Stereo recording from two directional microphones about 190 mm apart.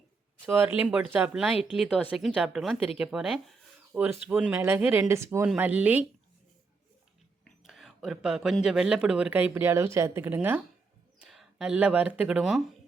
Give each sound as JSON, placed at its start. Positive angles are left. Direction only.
{"t": 0.4, "sound": "speech", "side_deg": -10}
{"t": 7.4, "sound": "speech", "side_deg": 0}